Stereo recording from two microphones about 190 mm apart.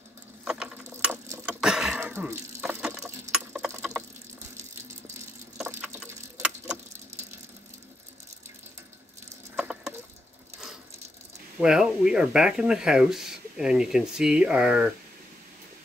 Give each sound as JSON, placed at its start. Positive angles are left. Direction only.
{"t": 0.5, "sound": "mechanisms", "side_deg": -5}
{"t": 1.5, "sound": "water", "side_deg": -5}
{"t": 3.7, "sound": "water", "side_deg": -15}
{"t": 5.7, "sound": "tick-tock", "side_deg": -10}
{"t": 9.6, "sound": "a sound", "side_deg": -5}
{"t": 11.6, "sound": "speech", "side_deg": -5}